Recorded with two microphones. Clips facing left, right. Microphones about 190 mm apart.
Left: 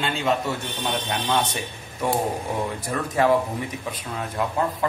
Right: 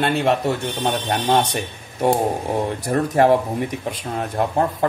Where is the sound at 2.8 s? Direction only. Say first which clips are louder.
Right 5 dB; 40° right (ahead or behind).